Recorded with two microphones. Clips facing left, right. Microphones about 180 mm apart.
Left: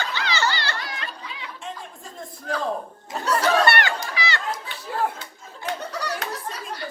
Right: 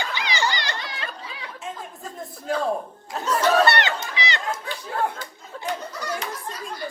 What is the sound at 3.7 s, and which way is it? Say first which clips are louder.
Children playing: even; 20° right (ahead or behind).